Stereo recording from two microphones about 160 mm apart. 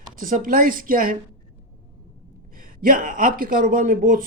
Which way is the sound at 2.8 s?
60° right (ahead or behind).